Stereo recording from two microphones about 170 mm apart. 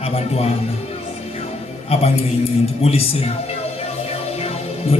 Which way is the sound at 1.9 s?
35° left (ahead or behind).